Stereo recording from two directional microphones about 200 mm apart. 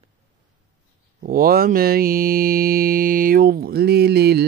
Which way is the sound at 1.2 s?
45° right (ahead or behind).